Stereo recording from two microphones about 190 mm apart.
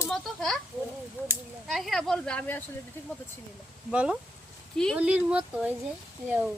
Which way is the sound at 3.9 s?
5° right (ahead or behind).